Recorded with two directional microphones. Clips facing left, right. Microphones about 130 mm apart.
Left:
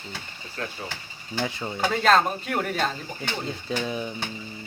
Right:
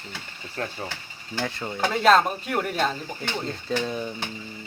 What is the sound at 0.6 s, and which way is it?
Speech, 40° right (ahead or behind).